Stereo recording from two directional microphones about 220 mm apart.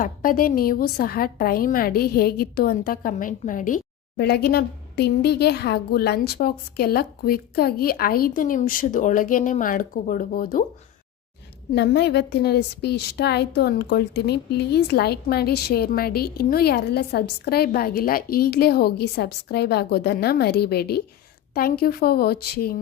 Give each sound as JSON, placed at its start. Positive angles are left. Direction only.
{"t": 0.0, "sound": "a woman's voice", "side_deg": 40}
{"t": 4.2, "sound": "a woman's voice", "side_deg": 45}
{"t": 11.7, "sound": "a woman's voice", "side_deg": 50}